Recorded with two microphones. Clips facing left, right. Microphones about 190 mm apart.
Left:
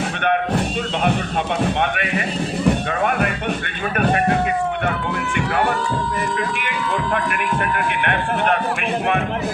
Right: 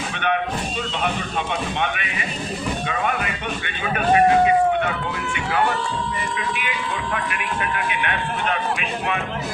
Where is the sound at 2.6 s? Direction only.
55° left (ahead or behind).